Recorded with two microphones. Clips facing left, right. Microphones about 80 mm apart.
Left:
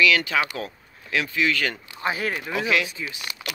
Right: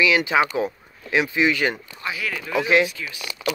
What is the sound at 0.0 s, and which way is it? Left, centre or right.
Speech, right.